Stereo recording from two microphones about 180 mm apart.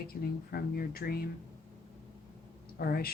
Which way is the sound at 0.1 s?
60° left (ahead or behind).